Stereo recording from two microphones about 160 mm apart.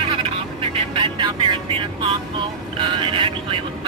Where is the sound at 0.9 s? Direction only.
30° right (ahead or behind).